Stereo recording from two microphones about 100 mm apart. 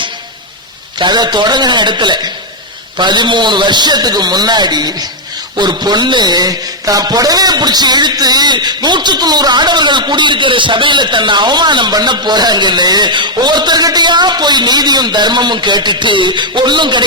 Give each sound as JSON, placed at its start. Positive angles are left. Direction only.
{"t": 0.9, "sound": "a man's voice", "side_deg": -45}